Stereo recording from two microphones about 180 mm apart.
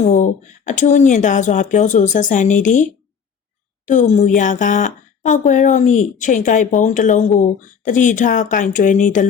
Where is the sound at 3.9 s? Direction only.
40° left (ahead or behind).